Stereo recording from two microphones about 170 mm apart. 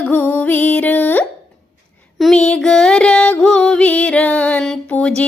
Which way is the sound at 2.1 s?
Centre (ahead or behind).